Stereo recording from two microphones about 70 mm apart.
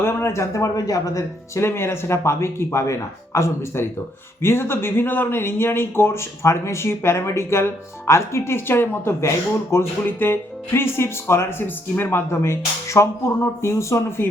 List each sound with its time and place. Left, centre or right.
0.0 s speech: left
1.6 s speech: left